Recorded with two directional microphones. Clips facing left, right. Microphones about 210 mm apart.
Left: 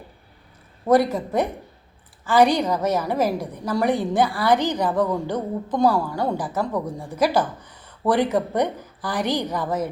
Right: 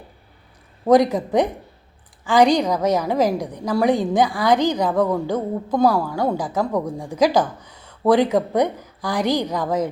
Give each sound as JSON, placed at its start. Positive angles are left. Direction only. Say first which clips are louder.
{"t": 0.9, "sound": "a woman's voice", "louder": "right 3 dB", "side_deg": -15}